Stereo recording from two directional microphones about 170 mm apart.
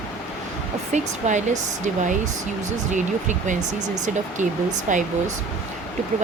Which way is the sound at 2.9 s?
45° right (ahead or behind).